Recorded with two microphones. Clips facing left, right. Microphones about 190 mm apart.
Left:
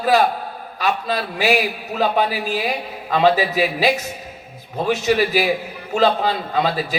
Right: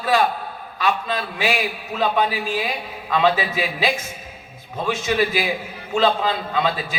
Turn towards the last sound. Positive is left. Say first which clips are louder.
# left 2 dB
turn(degrees=40)  # may be behind; listen again after turning